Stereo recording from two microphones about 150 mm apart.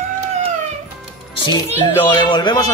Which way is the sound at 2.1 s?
30° left (ahead or behind).